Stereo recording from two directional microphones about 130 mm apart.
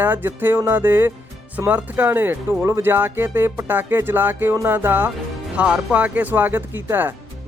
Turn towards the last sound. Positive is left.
turn(degrees=-15)  # may be behind; listen again after turning